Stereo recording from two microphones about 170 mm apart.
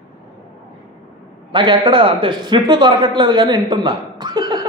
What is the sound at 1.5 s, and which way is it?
A man's voice, 25° right (ahead or behind).